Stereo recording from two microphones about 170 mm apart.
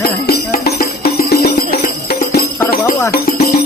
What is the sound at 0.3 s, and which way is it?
Music, 65° left (ahead or behind).